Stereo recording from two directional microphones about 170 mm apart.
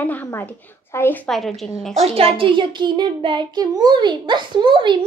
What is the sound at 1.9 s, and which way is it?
A child's voice, 35° right (ahead or behind).